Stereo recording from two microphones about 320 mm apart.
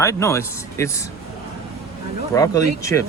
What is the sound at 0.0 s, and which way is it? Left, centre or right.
Speech, centre.